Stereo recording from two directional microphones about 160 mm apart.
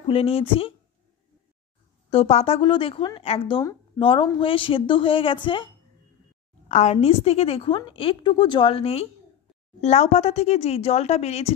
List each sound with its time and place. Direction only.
0.1 s a woman's voice: 35° left (ahead or behind)
2.0 s a woman's voice: 40° left (ahead or behind)
6.7 s a woman's voice: 45° left (ahead or behind)